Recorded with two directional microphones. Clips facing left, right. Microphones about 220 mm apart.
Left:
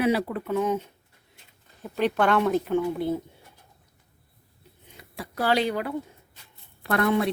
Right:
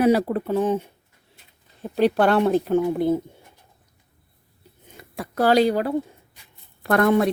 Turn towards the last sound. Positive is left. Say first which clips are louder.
# right 5 dB
turn(degrees=-45)  # may be behind; listen again after turning